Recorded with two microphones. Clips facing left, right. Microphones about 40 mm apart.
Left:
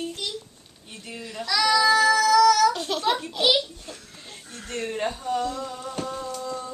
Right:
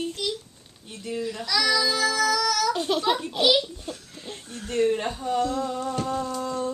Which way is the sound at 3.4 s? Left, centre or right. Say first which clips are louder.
Right 1 dB; centre.